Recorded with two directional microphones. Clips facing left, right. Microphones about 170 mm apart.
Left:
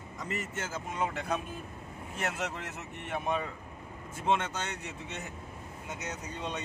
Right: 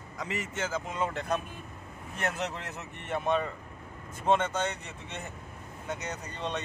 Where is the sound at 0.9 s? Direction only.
10° left (ahead or behind).